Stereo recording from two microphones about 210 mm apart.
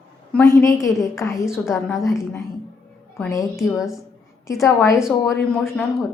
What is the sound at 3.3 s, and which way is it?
Speech, 15° left (ahead or behind).